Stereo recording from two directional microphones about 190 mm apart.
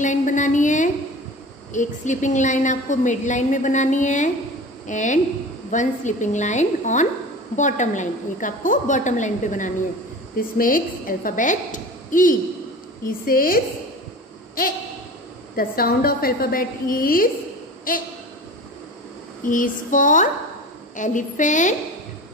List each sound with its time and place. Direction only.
0.0 s a woman's voice: 40° left (ahead or behind)
15.5 s a woman's voice: 50° left (ahead or behind)
19.4 s a woman's voice: 45° left (ahead or behind)